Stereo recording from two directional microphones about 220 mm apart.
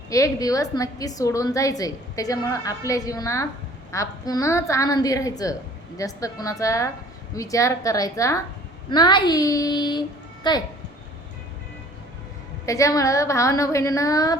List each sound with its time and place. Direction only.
0.1 s a woman's voice: 15° left (ahead or behind)
12.6 s a woman's voice: 15° left (ahead or behind)